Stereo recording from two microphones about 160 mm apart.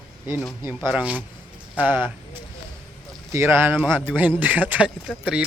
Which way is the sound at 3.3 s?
15° right (ahead or behind).